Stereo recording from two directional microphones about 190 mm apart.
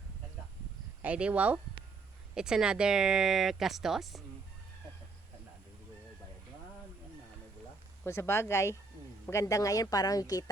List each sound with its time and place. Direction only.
1.0 s speech: 5° right (ahead or behind)
8.0 s a woman's voice: 15° left (ahead or behind)